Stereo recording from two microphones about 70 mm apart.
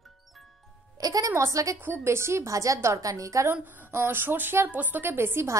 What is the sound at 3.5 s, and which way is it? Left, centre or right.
A woman's voice, right.